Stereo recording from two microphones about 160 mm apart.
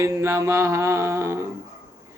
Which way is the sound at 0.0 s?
15° right (ahead or behind).